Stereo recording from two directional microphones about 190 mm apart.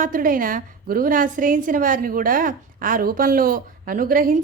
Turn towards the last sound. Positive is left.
turn(degrees=-45)  # may be behind; listen again after turning